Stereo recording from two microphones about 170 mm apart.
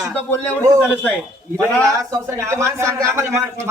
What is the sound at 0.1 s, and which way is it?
Speech, 10° left (ahead or behind).